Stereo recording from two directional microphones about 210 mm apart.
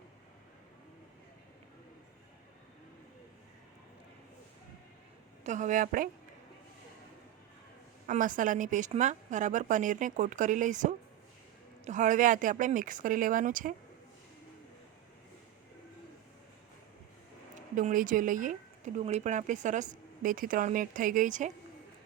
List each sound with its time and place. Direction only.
5.4 s a woman's voice: 35° right (ahead or behind)
8.0 s a woman's voice: 40° right (ahead or behind)
17.7 s a woman's voice: 40° right (ahead or behind)